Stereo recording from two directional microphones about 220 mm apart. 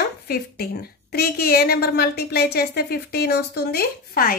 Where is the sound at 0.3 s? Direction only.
45° left (ahead or behind).